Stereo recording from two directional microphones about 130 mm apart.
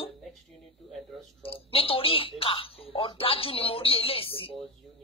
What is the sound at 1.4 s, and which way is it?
Speech, 45° left (ahead or behind).